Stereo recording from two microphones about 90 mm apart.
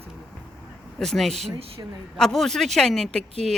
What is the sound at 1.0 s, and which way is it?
Speech, 5° left (ahead or behind).